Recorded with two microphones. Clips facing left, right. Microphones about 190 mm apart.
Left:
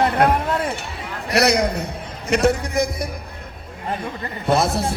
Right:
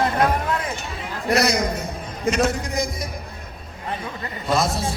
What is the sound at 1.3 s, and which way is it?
Speech, 65° left (ahead or behind).